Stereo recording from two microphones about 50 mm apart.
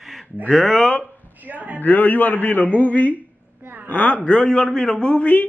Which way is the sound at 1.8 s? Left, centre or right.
Left.